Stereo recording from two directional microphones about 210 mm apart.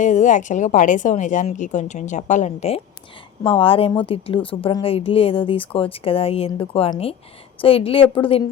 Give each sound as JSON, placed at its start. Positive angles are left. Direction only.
{"t": 0.0, "sound": "a woman's voice", "side_deg": 35}